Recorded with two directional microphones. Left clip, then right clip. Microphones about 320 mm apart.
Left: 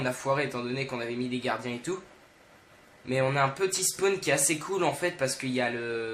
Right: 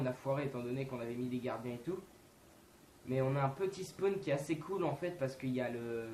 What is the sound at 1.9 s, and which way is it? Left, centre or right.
Speech, left.